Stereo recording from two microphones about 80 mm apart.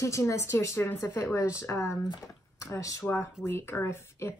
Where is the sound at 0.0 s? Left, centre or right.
Left.